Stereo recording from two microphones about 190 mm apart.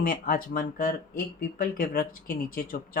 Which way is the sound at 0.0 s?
45° left (ahead or behind).